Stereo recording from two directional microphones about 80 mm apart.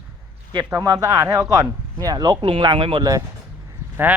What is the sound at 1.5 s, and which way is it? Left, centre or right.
Speech, right.